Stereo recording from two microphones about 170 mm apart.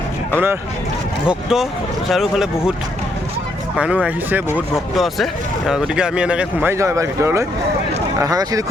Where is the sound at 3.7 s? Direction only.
5° right (ahead or behind).